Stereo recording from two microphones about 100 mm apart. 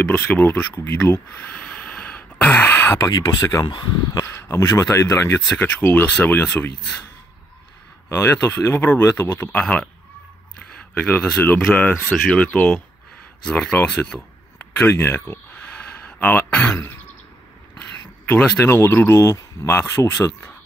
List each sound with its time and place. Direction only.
0.0 s speech: 20° left (ahead or behind)
1.4 s a sound: 15° left (ahead or behind)
3.0 s speech: 40° left (ahead or behind); by 6.7 s 20° left (ahead or behind)
8.1 s speech: 25° left (ahead or behind); by 14.2 s 10° left (ahead or behind)
14.6 s a sound: 25° left (ahead or behind)
18.6 s speech: 25° left (ahead or behind)